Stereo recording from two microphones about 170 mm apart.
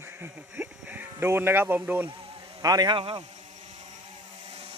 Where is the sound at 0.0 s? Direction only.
10° right (ahead or behind).